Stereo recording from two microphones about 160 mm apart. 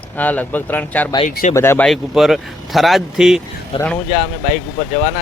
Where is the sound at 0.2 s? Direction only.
10° left (ahead or behind).